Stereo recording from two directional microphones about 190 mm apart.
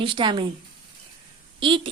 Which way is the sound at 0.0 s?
25° right (ahead or behind).